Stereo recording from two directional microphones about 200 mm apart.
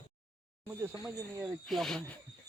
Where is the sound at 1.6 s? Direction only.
Centre (ahead or behind).